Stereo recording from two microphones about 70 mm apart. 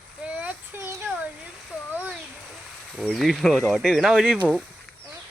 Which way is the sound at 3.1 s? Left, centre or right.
Centre.